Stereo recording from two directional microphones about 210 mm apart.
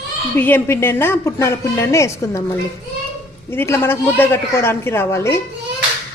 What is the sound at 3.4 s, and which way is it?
Speech, 10° left (ahead or behind).